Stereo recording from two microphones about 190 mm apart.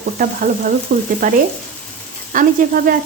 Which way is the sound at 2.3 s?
45° right (ahead or behind).